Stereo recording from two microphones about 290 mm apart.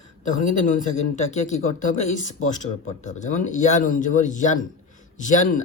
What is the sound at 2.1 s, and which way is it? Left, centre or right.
Speech, left.